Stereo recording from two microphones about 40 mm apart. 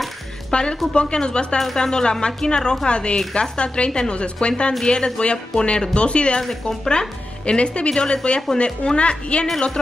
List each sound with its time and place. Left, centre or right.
0.5 s speech: left